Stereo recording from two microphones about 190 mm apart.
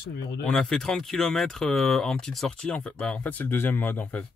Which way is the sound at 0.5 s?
Centre (ahead or behind).